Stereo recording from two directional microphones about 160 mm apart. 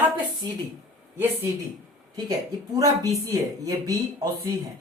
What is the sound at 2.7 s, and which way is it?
A man's voice, 25° right (ahead or behind).